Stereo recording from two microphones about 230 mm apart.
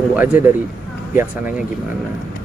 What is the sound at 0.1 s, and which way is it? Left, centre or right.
Speech, centre.